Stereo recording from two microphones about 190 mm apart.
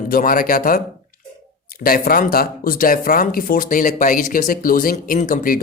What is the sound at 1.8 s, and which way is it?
Speech, 50° left (ahead or behind).